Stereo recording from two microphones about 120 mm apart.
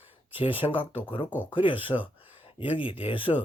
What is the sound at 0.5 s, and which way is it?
Speech, 15° right (ahead or behind).